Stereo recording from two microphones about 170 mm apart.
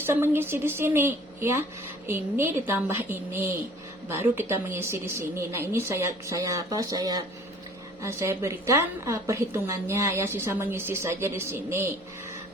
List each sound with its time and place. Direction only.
0.0 s a woman's voice: 15° right (ahead or behind)